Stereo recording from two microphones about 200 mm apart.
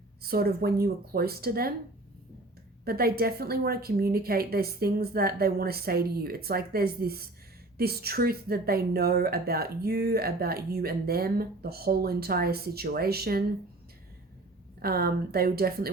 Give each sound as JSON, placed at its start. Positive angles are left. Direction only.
{"t": 0.2, "sound": "speech", "side_deg": -50}
{"t": 2.8, "sound": "speech", "side_deg": -50}
{"t": 14.8, "sound": "speech", "side_deg": -50}